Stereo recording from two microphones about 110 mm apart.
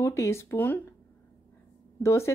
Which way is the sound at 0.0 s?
25° left (ahead or behind).